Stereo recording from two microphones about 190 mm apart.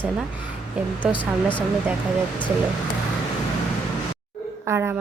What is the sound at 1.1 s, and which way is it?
Speech, 25° left (ahead or behind).